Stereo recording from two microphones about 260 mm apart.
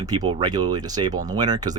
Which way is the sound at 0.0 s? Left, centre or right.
Centre.